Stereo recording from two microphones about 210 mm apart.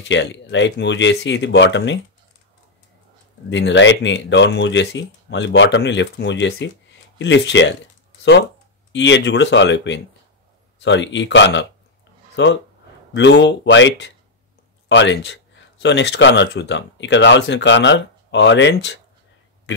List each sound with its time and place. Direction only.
0.1 s speech: 60° left (ahead or behind)
3.4 s speech: 60° left (ahead or behind)
8.9 s speech: 60° left (ahead or behind)